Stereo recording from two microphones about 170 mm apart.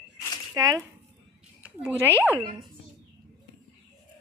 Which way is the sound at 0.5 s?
20° right (ahead or behind).